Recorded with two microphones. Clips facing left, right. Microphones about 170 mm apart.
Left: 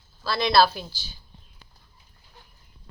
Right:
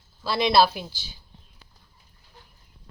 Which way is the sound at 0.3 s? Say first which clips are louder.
Even; 20° right (ahead or behind).